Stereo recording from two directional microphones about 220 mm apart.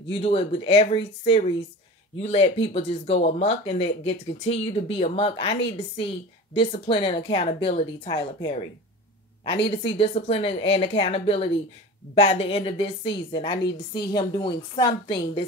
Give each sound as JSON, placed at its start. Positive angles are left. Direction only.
{"t": 0.1, "sound": "speech", "side_deg": 25}
{"t": 9.7, "sound": "speech", "side_deg": 25}